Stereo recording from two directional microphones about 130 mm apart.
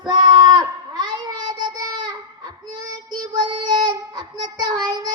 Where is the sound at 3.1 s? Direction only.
35° right (ahead or behind).